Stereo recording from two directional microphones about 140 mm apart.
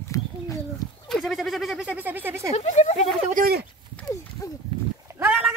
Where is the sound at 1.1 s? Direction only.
Centre (ahead or behind); by 2.5 s 15° right (ahead or behind).